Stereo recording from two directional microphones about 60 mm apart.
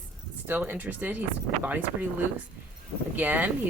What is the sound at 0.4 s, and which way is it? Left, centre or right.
Speech, right.